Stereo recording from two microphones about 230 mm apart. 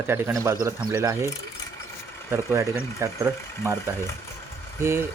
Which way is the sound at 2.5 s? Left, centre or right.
Centre.